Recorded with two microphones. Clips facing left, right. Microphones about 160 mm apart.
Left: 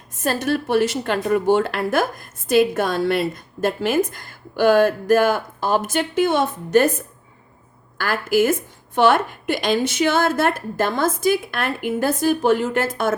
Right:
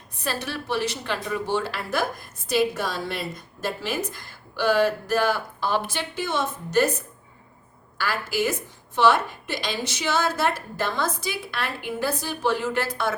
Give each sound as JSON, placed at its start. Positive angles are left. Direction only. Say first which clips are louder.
{"t": 0.1, "sound": "a woman's voice", "louder": "left 9 dB", "side_deg": 45}